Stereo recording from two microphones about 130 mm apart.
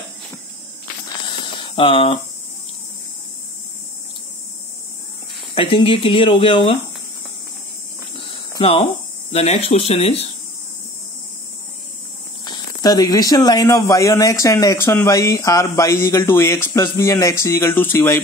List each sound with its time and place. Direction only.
1.2 s a sound: 40° left (ahead or behind)
5.5 s speech: 45° left (ahead or behind)
8.2 s hum: 45° left (ahead or behind)
9.3 s speech: 55° left (ahead or behind)
12.4 s speech: 35° left (ahead or behind)